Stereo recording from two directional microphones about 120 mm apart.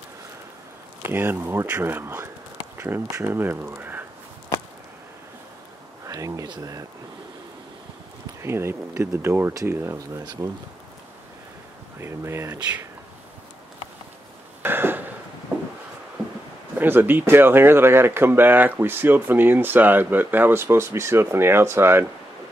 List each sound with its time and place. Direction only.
1.0 s speech: 20° right (ahead or behind)
6.0 s speech: 30° right (ahead or behind)
8.4 s speech: 20° right (ahead or behind)
12.0 s speech: 20° right (ahead or behind)
14.6 s a sound: 15° right (ahead or behind)
16.7 s speech: 15° right (ahead or behind)